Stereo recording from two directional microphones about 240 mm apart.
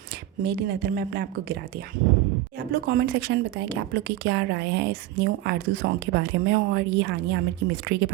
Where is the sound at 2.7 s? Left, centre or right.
Right.